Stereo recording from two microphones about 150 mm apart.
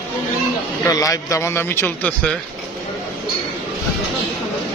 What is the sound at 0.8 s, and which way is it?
A man's voice, 25° left (ahead or behind).